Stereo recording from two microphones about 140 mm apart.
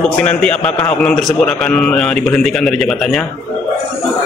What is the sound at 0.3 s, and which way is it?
A man's voice, 5° left (ahead or behind).